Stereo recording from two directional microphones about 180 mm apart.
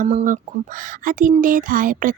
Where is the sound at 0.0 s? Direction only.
40° right (ahead or behind).